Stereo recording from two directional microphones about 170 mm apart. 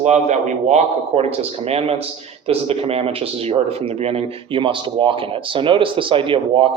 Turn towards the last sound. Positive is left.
turn(degrees=-30)  # may be behind; listen again after turning